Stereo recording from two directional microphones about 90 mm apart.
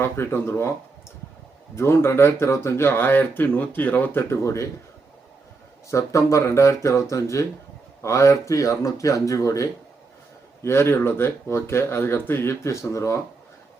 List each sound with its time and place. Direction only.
0.0 s speech: 25° left (ahead or behind)
1.7 s speech: 30° left (ahead or behind)
5.9 s speech: 35° left (ahead or behind)